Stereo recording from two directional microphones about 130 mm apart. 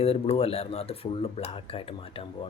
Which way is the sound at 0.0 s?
55° left (ahead or behind).